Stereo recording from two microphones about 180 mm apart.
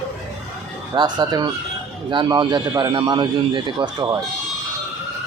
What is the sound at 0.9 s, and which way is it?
Speech, 25° right (ahead or behind).